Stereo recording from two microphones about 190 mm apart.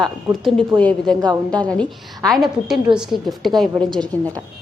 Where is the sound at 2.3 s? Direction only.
Centre (ahead or behind).